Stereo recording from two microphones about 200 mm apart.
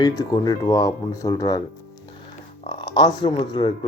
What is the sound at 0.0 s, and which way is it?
Speech, 20° left (ahead or behind).